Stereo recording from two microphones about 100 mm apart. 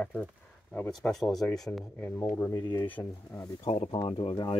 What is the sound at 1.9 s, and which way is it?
Speech, 25° left (ahead or behind).